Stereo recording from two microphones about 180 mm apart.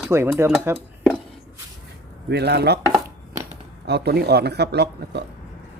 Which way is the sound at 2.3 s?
65° right (ahead or behind).